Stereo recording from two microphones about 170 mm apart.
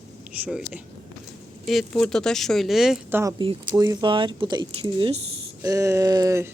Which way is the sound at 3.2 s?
20° right (ahead or behind).